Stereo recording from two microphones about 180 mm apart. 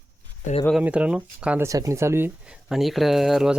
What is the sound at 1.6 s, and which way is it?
Speech, 15° right (ahead or behind).